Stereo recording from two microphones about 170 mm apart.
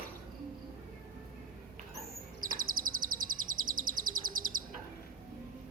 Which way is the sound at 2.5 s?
55° right (ahead or behind).